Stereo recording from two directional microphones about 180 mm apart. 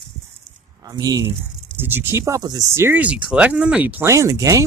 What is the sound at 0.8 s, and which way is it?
Speech, 20° right (ahead or behind).